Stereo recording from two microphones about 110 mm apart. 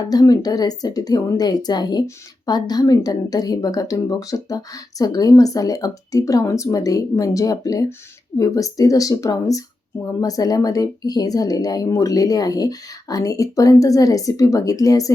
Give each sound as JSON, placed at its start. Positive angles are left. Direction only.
{"t": 0.0, "sound": "speech", "side_deg": 35}